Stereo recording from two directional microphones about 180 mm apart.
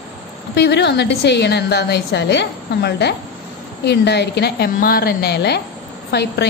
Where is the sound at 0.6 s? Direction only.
70° left (ahead or behind).